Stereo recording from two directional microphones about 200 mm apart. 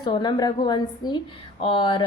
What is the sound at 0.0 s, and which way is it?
A woman's voice, 20° left (ahead or behind).